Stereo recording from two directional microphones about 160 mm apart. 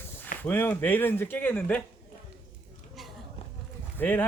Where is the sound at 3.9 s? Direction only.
10° left (ahead or behind).